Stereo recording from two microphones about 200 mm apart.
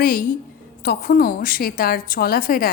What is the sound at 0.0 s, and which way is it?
A woman's voice, 45° left (ahead or behind).